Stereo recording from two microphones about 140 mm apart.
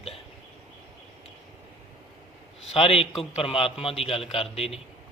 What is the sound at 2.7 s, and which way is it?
A man's voice, 45° left (ahead or behind).